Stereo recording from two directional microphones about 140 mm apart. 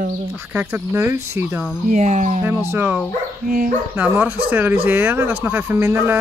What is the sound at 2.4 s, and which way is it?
Speech, 15° right (ahead or behind).